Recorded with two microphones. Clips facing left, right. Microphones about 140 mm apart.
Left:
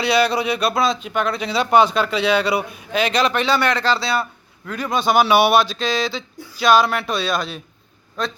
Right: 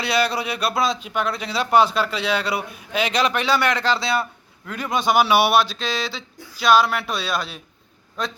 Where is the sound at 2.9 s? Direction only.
10° right (ahead or behind).